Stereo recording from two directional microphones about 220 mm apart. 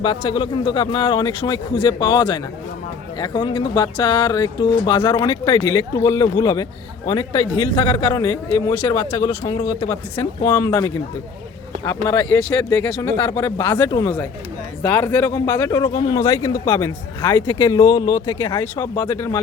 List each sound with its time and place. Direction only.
0.0 s a man's voice: 25° left (ahead or behind)
12.0 s a man's voice: 10° left (ahead or behind)